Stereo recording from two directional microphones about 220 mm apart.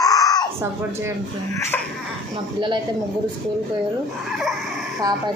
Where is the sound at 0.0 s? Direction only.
15° left (ahead or behind).